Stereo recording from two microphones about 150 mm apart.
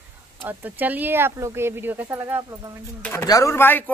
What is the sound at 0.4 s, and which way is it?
Speech, 10° right (ahead or behind).